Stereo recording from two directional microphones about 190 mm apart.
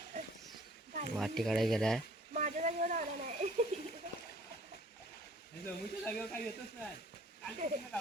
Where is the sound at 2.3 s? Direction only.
40° right (ahead or behind).